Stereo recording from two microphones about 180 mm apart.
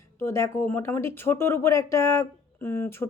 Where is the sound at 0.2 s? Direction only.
15° left (ahead or behind).